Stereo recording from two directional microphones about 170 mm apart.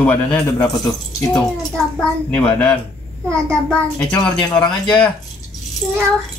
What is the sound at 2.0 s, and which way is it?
Speech, 5° left (ahead or behind).